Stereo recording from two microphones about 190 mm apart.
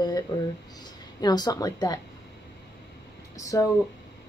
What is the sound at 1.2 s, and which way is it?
Speech, 20° left (ahead or behind).